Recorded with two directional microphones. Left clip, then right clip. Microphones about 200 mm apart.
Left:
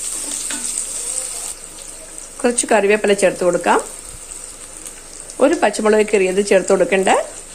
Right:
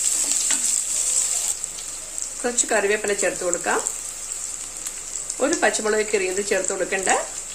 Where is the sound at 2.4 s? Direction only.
40° left (ahead or behind).